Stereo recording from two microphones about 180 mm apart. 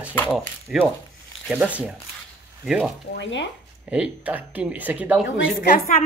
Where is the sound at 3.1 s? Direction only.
85° left.